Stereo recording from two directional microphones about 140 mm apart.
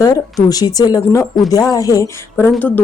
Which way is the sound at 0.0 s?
25° left (ahead or behind).